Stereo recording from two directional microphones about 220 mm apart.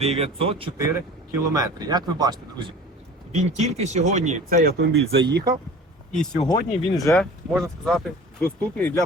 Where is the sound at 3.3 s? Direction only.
30° right (ahead or behind); by 4.9 s 45° right (ahead or behind).